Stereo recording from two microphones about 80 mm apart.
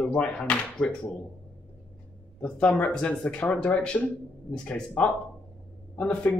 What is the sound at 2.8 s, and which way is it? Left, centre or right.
Speech, centre.